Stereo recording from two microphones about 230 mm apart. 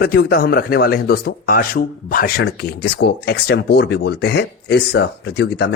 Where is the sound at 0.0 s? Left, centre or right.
Left.